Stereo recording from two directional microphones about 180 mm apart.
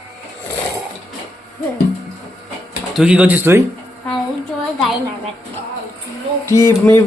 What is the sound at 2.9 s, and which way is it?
Speech, 5° right (ahead or behind).